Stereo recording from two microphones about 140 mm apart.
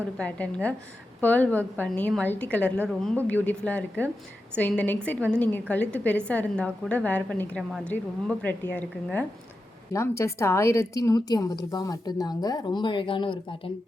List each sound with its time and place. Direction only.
0.2 s a woman's voice: 10° left (ahead or behind); by 13.4 s 35° left (ahead or behind)